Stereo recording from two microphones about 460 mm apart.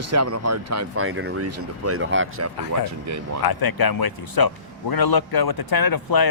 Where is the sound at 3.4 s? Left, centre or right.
Left.